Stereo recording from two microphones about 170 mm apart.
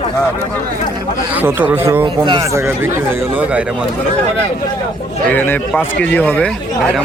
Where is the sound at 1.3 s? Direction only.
10° right (ahead or behind).